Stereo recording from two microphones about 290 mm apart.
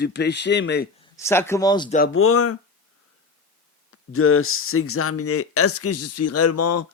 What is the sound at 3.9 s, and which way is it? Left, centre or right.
Speech, left.